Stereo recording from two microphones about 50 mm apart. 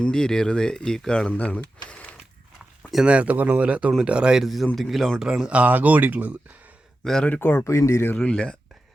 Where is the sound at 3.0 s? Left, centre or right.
Right.